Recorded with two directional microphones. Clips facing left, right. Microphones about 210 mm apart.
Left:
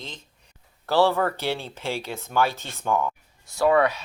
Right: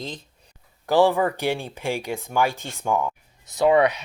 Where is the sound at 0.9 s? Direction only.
15° right (ahead or behind).